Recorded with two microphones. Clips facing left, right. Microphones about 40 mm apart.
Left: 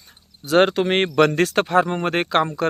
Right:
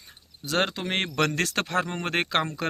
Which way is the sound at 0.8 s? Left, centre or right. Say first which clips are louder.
Left 9 dB; left.